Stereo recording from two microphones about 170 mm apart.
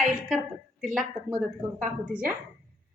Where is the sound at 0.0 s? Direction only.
Centre (ahead or behind).